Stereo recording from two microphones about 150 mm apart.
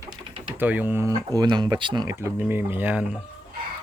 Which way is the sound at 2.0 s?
20° right (ahead or behind).